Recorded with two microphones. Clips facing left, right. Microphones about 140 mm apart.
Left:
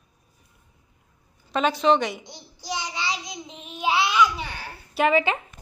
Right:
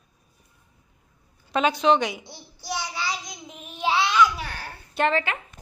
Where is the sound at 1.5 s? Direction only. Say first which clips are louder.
Even; centre (ahead or behind).